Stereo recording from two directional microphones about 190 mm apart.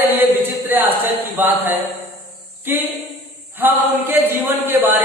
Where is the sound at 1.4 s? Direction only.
10° right (ahead or behind).